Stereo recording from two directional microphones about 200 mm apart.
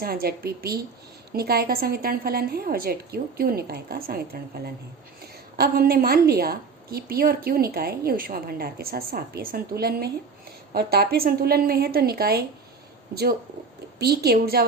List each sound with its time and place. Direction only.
0.0 s a woman's voice: 50° right (ahead or behind)
5.5 s a woman's voice: 50° right (ahead or behind)
14.0 s a woman's voice: 55° right (ahead or behind)